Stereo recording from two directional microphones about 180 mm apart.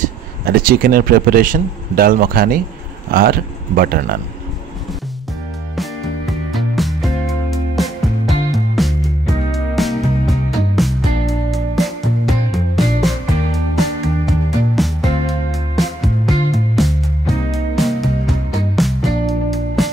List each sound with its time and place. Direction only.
0.0 s speech: 55° right (ahead or behind)
5.8 s music: centre (ahead or behind)